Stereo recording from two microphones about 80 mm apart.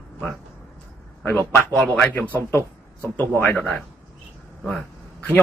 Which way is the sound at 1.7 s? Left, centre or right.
Centre.